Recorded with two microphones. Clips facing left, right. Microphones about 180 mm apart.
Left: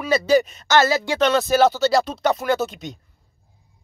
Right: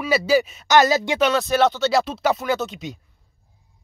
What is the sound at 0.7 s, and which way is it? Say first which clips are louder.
Speech: right 1 dB; 20° right (ahead or behind).